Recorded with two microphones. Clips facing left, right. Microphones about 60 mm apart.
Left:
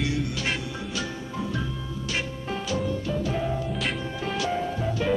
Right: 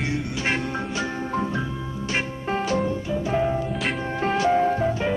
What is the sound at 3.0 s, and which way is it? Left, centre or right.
Music, right.